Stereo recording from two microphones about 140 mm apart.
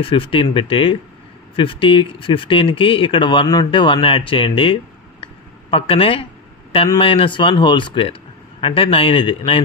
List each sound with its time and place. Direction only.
0.0 s speech: 40° left (ahead or behind)
5.2 s a sound: 40° left (ahead or behind)
7.0 s speech: 40° left (ahead or behind)